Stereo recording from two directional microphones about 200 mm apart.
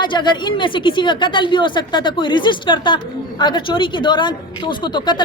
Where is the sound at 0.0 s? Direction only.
25° left (ahead or behind).